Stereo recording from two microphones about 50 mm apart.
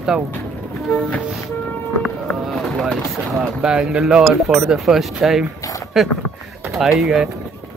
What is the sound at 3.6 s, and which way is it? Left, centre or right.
Speech, centre.